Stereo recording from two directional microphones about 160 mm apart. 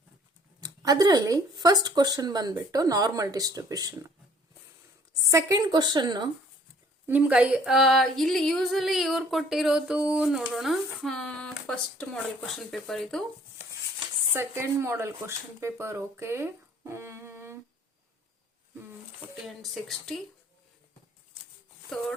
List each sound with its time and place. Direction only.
0.6 s speech: 25° right (ahead or behind)
5.3 s speech: 25° right (ahead or behind)
7.1 s speech: 10° right (ahead or behind)
14.3 s speech: 15° right (ahead or behind)
19.4 s speech: centre (ahead or behind)